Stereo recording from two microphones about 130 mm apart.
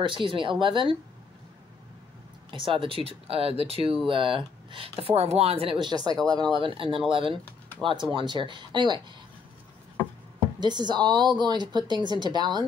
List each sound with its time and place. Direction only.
0.0 s speech: 40° right (ahead or behind)
2.5 s speech: 40° right (ahead or behind)
10.6 s speech: 35° right (ahead or behind)